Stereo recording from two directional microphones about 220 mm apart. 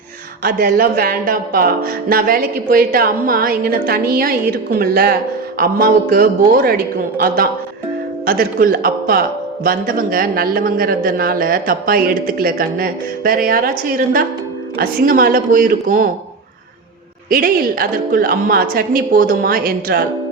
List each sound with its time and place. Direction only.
0.4 s speech: 45° right (ahead or behind)
17.2 s speech: 40° right (ahead or behind)